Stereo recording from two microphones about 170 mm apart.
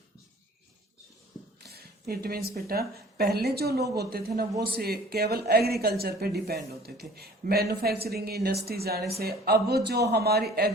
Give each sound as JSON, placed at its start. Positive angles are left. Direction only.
{"t": 1.6, "sound": "a woman's voice", "side_deg": -65}